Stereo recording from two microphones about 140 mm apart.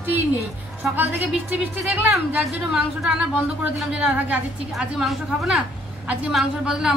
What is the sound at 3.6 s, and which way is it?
A woman's voice, 10° right (ahead or behind).